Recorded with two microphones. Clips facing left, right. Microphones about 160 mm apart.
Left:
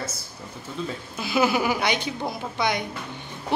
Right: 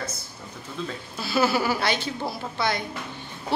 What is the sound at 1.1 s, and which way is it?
A woman's voice, 15° left (ahead or behind).